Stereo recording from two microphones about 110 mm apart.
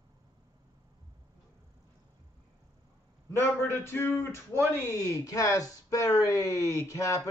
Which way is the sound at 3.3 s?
25° left (ahead or behind).